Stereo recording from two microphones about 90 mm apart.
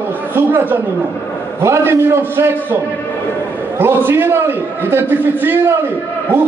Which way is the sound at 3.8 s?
25° right (ahead or behind).